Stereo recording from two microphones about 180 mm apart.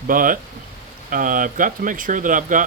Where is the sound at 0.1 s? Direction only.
50° right (ahead or behind).